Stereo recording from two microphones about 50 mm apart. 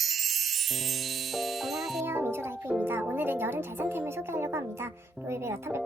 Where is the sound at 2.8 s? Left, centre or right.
Right.